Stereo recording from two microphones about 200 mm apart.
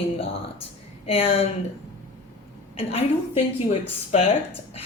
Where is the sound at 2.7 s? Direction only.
30° left (ahead or behind).